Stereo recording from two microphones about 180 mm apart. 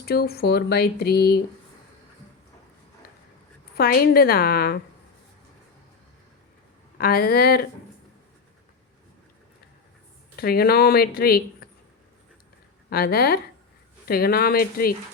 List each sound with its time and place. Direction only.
0.0 s speech: 60° left (ahead or behind)
3.8 s speech: 55° left (ahead or behind)
7.0 s speech: 55° left (ahead or behind)
10.3 s speech: 60° left (ahead or behind)
12.9 s speech: 60° left (ahead or behind)